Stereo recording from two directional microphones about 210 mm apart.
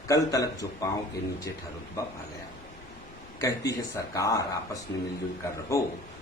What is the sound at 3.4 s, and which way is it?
Speech, 15° left (ahead or behind).